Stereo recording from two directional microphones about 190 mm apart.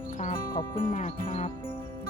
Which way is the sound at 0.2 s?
45° left (ahead or behind).